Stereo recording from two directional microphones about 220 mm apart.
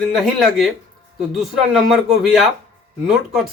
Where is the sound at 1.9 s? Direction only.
Centre (ahead or behind).